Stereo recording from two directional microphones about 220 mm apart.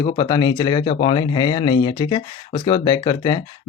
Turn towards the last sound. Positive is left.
turn(degrees=20)  # may be behind; listen again after turning